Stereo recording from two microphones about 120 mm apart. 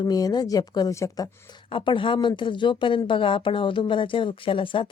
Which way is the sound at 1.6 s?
45° left (ahead or behind).